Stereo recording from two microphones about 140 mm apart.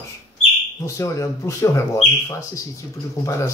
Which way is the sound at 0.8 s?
20° left (ahead or behind).